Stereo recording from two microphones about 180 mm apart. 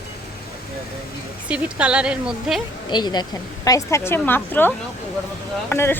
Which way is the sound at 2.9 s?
25° left (ahead or behind).